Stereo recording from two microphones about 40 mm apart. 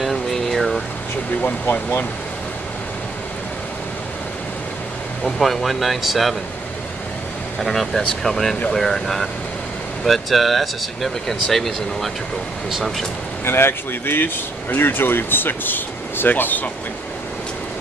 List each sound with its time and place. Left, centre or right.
0.0 s a sound: centre
1.4 s speech: left
5.4 s speech: centre
7.6 s speech: centre
13.5 s speech: left